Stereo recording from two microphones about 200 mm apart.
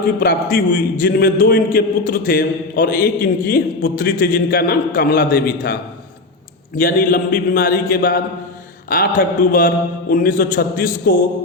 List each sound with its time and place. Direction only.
0.2 s a man's voice: 50° left (ahead or behind)
6.7 s a man's voice: 45° left (ahead or behind)